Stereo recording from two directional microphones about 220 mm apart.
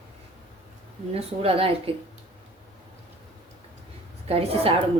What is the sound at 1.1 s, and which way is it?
Speech, 25° right (ahead or behind).